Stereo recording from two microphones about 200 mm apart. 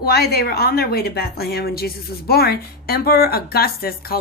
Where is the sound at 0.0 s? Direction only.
50° left (ahead or behind).